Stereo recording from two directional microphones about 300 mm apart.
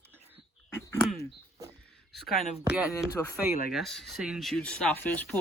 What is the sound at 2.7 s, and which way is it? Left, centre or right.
Speech, centre.